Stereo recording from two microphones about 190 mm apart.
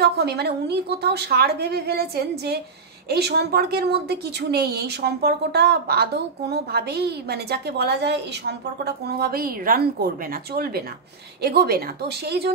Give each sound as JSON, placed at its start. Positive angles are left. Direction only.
{"t": 0.0, "sound": "a woman's voice", "side_deg": -60}